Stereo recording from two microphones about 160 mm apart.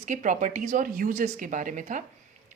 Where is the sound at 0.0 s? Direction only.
50° right (ahead or behind).